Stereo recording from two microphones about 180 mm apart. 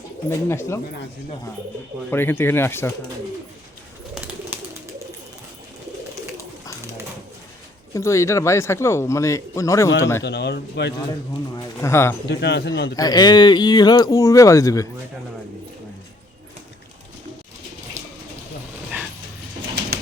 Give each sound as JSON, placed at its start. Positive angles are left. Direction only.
{"t": 0.3, "sound": "speech", "side_deg": 15}
{"t": 2.0, "sound": "speech", "side_deg": 10}
{"t": 4.1, "sound": "bird", "side_deg": -10}
{"t": 7.9, "sound": "speech", "side_deg": 15}
{"t": 10.2, "sound": "speech", "side_deg": 70}
{"t": 11.5, "sound": "speech", "side_deg": 15}
{"t": 12.3, "sound": "speech", "side_deg": 70}
{"t": 13.0, "sound": "speech", "side_deg": 20}